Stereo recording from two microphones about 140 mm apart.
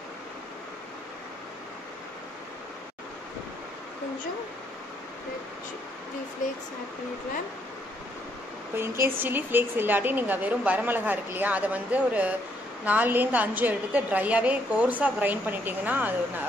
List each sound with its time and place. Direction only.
8.7 s a woman's voice: 20° right (ahead or behind)